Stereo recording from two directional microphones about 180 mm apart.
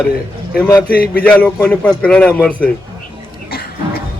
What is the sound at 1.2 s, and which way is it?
A man's voice, 5° left (ahead or behind).